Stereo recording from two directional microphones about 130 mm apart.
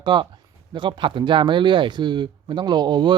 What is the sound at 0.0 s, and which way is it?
Speech, 35° right (ahead or behind).